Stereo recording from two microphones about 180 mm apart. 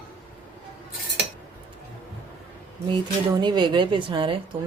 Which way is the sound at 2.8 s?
25° right (ahead or behind).